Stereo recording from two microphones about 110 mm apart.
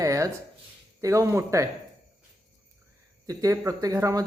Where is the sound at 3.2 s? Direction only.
30° right (ahead or behind).